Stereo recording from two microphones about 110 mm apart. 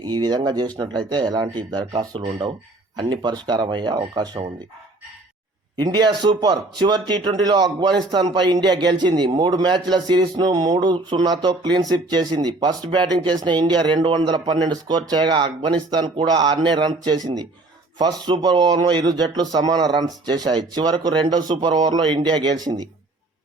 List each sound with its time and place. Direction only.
0.0 s a man's voice: 40° right (ahead or behind)
5.7 s a man's voice: 40° right (ahead or behind)